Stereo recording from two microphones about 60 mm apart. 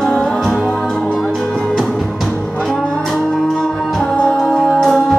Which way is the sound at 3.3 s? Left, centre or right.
Centre.